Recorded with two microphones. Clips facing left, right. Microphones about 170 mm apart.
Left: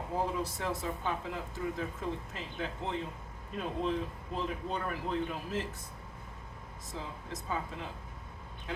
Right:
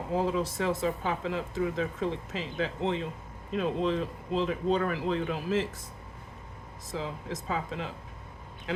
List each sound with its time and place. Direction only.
0.1 s speech: 90° right
6.9 s speech: 90° right